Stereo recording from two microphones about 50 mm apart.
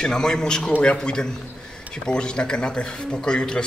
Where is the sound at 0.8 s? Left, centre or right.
Centre.